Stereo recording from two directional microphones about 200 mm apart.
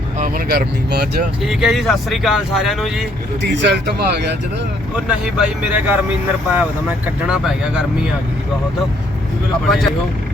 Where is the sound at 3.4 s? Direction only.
60° right (ahead or behind).